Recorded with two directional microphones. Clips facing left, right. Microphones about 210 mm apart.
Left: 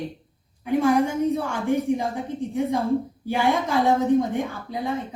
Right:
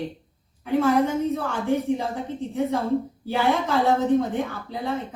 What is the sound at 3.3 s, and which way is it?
A woman's voice, 15° left (ahead or behind).